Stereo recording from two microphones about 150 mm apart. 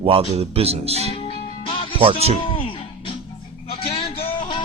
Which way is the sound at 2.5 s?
35° left (ahead or behind).